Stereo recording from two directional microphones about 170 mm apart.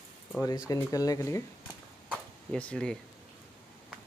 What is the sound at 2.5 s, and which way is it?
Speech, 5° left (ahead or behind).